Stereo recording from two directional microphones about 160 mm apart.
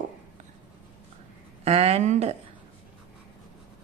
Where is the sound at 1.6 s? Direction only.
40° right (ahead or behind).